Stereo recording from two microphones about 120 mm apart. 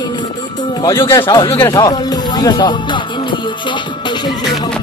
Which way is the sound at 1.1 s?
40° left (ahead or behind).